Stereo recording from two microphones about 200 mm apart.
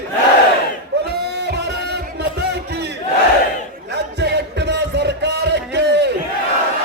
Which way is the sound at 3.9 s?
55° right (ahead or behind).